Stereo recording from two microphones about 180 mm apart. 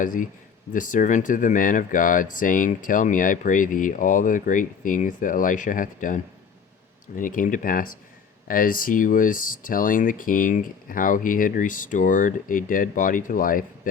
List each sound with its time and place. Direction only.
0.0 s speech: 50° left (ahead or behind)
7.2 s speech: 50° left (ahead or behind)